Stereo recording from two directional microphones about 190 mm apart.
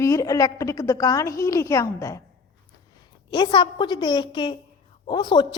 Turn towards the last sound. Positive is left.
turn(degrees=25)  # may be behind; listen again after turning